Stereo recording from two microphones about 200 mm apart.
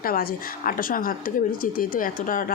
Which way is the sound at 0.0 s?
45° left (ahead or behind).